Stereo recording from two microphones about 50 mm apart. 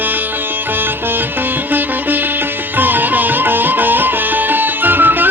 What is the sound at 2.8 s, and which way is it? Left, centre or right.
Music, right.